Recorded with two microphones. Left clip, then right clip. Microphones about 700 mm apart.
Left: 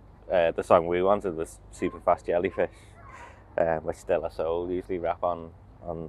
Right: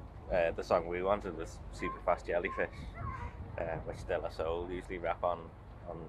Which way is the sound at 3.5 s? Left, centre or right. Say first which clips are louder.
Left 13 dB; left.